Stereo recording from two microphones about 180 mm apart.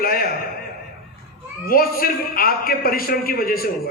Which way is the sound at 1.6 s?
55° left (ahead or behind).